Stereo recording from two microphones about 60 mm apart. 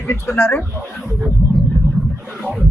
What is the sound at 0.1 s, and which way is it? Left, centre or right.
Speech, left.